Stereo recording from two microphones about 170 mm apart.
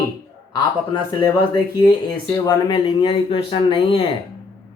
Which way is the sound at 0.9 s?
25° left (ahead or behind).